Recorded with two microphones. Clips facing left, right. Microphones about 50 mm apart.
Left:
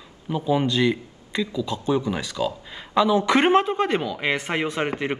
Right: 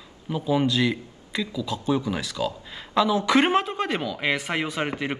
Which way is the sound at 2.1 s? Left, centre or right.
Centre.